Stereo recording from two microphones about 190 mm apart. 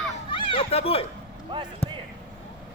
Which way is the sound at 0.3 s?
25° left (ahead or behind).